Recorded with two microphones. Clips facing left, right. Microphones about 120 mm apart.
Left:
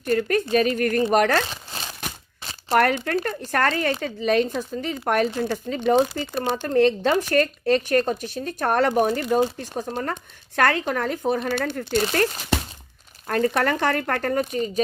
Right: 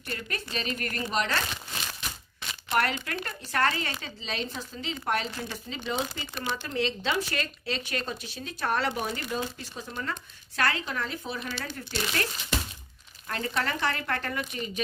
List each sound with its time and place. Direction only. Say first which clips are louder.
0.0 s speech: left 15 dB; 45° left (ahead or behind)
1.7 s a sound: left 4 dB; 35° left (ahead or behind)
2.7 s speech: left 8 dB; 55° left (ahead or behind)
6.3 s speech: left 11 dB; 40° left (ahead or behind)